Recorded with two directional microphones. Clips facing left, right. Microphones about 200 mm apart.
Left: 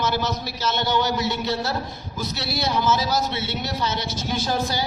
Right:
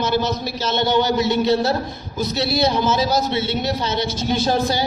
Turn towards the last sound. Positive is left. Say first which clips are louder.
# right 5 dB
turn(degrees=-25)  # may be behind; listen again after turning